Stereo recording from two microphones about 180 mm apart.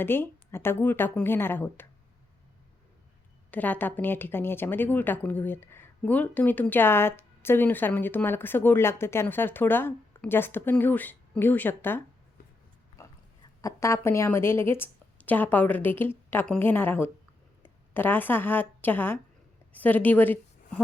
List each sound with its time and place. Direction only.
0.0 s speech: 10° left (ahead or behind)
3.5 s speech: 10° left (ahead or behind)
13.0 s a sound: 20° left (ahead or behind)
13.6 s a woman's voice: 15° left (ahead or behind)